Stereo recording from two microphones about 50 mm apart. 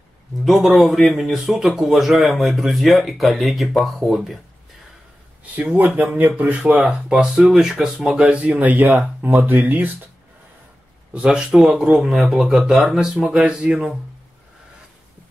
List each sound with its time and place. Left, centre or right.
0.7 s speech: centre
5.6 s speech: right
6.9 s speech: centre
8.4 s speech: right
11.2 s speech: centre
13.2 s speech: centre